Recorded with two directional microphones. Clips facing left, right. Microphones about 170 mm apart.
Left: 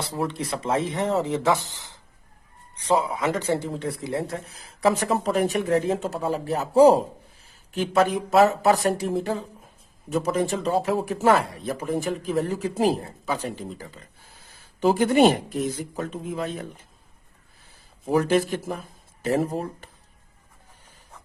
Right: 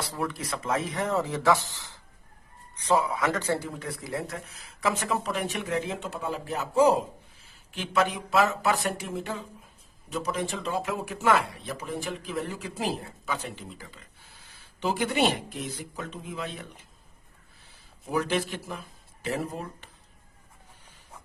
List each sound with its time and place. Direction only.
0.1 s speech: 25° left (ahead or behind)
10.1 s speech: 50° left (ahead or behind)
18.1 s speech: 45° left (ahead or behind)